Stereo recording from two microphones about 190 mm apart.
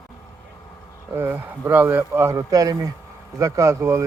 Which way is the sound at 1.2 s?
10° right (ahead or behind).